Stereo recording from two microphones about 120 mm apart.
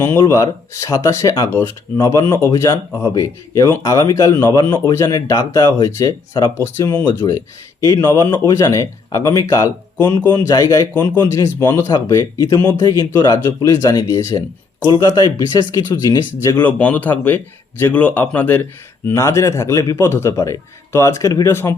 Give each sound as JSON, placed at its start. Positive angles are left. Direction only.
{"t": 0.2, "sound": "speech", "side_deg": 30}
{"t": 10.9, "sound": "a man's voice", "side_deg": 15}
{"t": 11.9, "sound": "speech", "side_deg": 30}
{"t": 16.6, "sound": "a man's voice", "side_deg": 10}
{"t": 19.0, "sound": "speech", "side_deg": 25}